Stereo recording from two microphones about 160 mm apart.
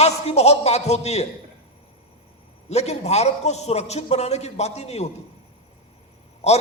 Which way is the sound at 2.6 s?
45° left (ahead or behind).